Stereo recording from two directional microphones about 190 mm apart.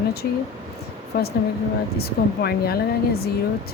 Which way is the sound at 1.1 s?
55° left (ahead or behind).